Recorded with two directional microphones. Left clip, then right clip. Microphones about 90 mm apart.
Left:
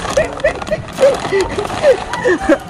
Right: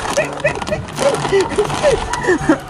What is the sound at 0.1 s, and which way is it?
Horse, 25° left (ahead or behind).